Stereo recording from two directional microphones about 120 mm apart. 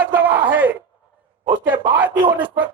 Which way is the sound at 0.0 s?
15° right (ahead or behind).